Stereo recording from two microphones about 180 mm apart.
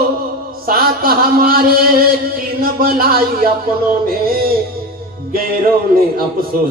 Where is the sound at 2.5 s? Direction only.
55° right (ahead or behind).